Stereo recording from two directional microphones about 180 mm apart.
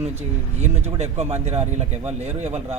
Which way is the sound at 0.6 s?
40° right (ahead or behind).